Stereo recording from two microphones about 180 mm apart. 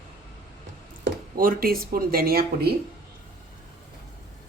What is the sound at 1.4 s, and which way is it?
Speech, 55° right (ahead or behind).